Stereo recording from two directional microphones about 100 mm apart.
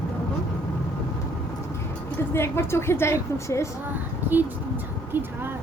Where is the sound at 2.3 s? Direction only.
25° left (ahead or behind).